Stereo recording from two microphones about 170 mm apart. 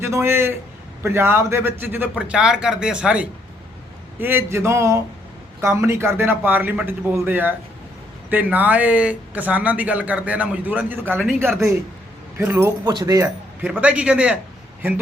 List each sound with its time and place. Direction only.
0.0 s speech: 15° right (ahead or behind)
11.2 s speech: 5° left (ahead or behind)
12.4 s speech: 15° right (ahead or behind)